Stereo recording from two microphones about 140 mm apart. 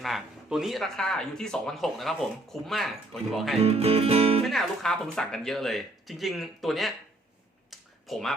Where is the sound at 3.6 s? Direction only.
45° right (ahead or behind).